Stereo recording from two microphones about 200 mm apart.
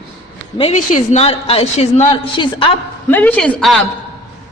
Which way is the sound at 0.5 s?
35° left (ahead or behind).